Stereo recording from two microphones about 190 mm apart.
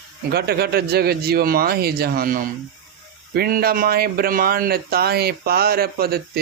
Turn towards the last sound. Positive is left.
turn(degrees=-55)  # may be behind; listen again after turning